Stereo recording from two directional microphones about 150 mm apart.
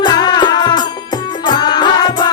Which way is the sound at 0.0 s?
30° left (ahead or behind).